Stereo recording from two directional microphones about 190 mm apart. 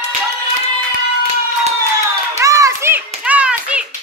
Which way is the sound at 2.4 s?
15° right (ahead or behind).